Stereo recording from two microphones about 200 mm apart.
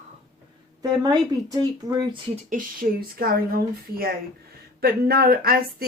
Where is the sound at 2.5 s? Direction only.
45° right (ahead or behind).